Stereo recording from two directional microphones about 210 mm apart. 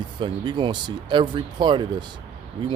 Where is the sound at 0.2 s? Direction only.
20° right (ahead or behind).